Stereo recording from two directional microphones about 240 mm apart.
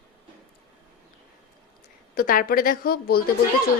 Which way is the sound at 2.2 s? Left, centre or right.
Left.